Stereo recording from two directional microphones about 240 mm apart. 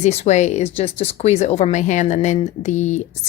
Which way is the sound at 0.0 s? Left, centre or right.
Left.